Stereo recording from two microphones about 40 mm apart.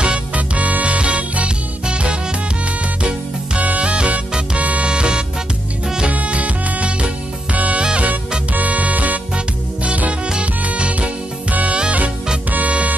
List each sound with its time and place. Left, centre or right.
0.0 s music: right
0.6 s music: right
4.8 s music: right